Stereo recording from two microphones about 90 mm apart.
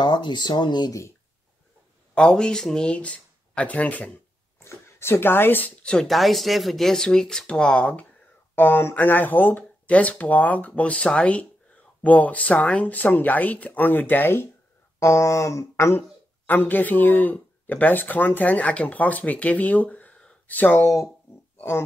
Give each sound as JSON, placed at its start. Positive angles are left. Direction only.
{"t": 0.0, "sound": "speech", "side_deg": 60}
{"t": 2.1, "sound": "speech", "side_deg": 10}
{"t": 4.6, "sound": "speech", "side_deg": 30}
{"t": 5.9, "sound": "speech", "side_deg": 5}
{"t": 21.5, "sound": "a sound", "side_deg": 30}